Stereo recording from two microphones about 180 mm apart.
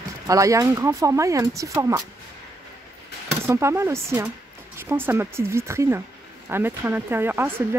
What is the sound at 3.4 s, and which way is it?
Speech, 15° right (ahead or behind).